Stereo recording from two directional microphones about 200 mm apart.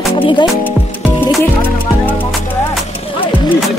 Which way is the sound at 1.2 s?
10° left (ahead or behind).